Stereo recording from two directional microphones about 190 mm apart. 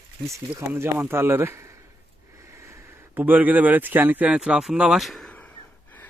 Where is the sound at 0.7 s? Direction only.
10° right (ahead or behind).